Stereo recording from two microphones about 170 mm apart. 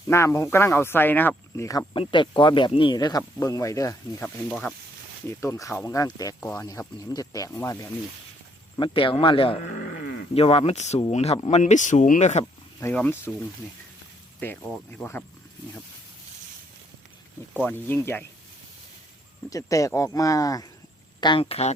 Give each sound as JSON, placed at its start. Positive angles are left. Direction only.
{"t": 0.1, "sound": "speech", "side_deg": 15}
{"t": 1.9, "sound": "speech", "side_deg": 30}
{"t": 4.4, "sound": "speech", "side_deg": 5}
{"t": 5.3, "sound": "speech", "side_deg": 15}
{"t": 8.8, "sound": "speech", "side_deg": 30}
{"t": 12.8, "sound": "speech", "side_deg": 10}
{"t": 14.3, "sound": "speech", "side_deg": 10}
{"t": 17.7, "sound": "speech", "side_deg": 10}
{"t": 19.5, "sound": "speech", "side_deg": 20}